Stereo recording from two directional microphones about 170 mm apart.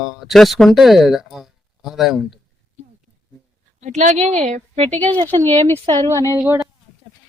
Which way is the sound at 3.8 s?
45° right (ahead or behind).